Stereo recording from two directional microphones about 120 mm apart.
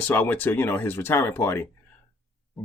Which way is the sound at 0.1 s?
15° left (ahead or behind).